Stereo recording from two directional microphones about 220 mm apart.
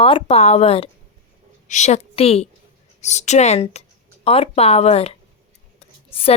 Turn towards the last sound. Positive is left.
turn(degrees=25)  # may be behind; listen again after turning